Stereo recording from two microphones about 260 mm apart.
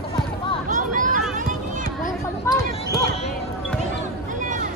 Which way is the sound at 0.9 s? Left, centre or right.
Right.